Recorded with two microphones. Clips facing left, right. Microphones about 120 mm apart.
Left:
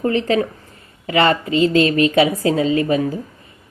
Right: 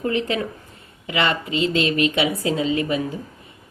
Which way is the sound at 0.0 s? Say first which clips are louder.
Left 5 dB; 35° left (ahead or behind).